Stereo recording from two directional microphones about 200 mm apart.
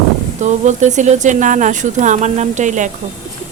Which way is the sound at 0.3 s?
35° right (ahead or behind).